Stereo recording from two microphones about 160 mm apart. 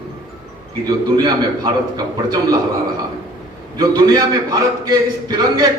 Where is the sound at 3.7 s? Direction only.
25° right (ahead or behind).